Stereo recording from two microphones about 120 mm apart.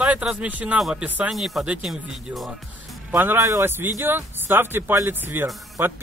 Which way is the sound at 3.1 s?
20° right (ahead or behind).